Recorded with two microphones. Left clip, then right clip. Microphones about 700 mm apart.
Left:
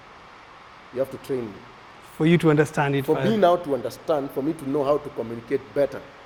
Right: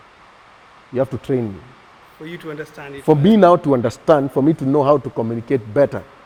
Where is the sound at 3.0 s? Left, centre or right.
Right.